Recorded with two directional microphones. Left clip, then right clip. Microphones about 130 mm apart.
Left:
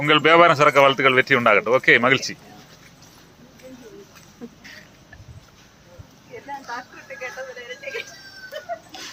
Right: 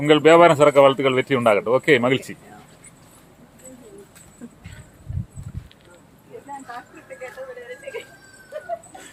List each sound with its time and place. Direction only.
0.0 s speech: 25° right (ahead or behind)